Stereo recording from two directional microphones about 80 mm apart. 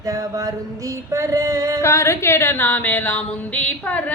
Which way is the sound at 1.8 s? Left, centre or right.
Left.